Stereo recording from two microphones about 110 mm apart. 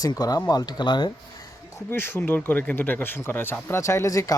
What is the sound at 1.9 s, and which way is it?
Speech, 20° left (ahead or behind).